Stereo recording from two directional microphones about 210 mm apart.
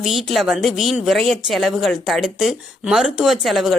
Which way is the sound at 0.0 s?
Centre (ahead or behind).